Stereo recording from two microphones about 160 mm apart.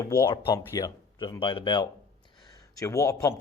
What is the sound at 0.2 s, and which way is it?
A man's voice, 15° left (ahead or behind).